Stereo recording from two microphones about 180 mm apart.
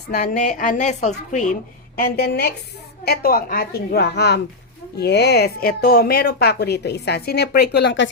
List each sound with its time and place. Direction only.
0.1 s a woman's voice: 50° left (ahead or behind)
2.0 s a woman's voice: 60° left (ahead or behind); by 8.1 s 80° left